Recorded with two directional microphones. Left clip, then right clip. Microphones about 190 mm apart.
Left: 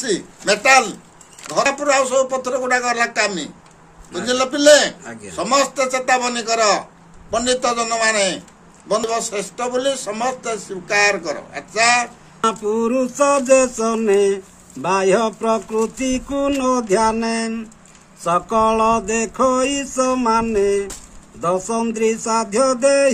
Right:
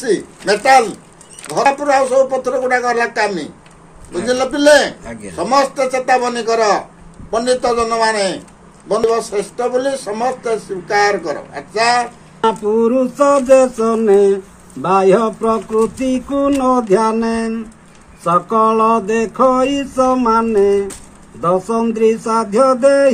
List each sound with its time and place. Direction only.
0.0 s a man's voice: 10° left (ahead or behind)
12.4 s a sound: 30° left (ahead or behind)
12.7 s a man's voice: 10° left (ahead or behind)
16.1 s mantra: 5° left (ahead or behind)